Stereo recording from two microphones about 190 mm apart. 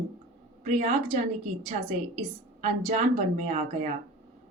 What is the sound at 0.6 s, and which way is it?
Speech, 40° right (ahead or behind).